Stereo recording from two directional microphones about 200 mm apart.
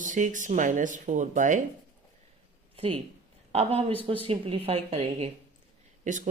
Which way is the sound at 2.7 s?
30° right (ahead or behind).